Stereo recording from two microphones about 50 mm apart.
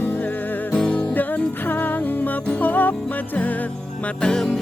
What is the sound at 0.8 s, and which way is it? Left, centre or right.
Music, left.